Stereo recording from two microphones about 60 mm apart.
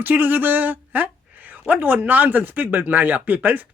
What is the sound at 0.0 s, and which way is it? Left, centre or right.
A woman's voice, right.